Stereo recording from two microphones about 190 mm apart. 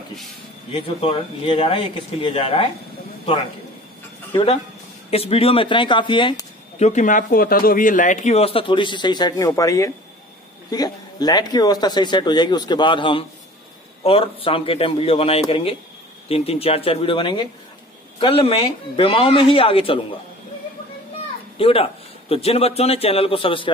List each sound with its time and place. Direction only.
0.7 s speech: 30° left (ahead or behind)
4.3 s speech: 30° left (ahead or behind)
6.9 s speech: 40° left (ahead or behind)
21.5 s speech: 30° left (ahead or behind)